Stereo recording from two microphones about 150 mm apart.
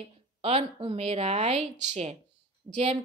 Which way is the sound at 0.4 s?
40° right (ahead or behind).